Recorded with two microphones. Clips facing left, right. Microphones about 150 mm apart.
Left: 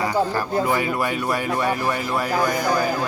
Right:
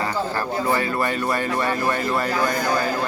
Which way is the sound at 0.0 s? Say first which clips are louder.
Left 3 dB; 15° left (ahead or behind).